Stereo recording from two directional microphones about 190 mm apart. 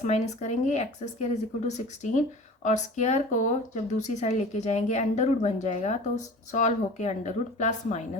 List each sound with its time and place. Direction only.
0.0 s speech: 35° left (ahead or behind)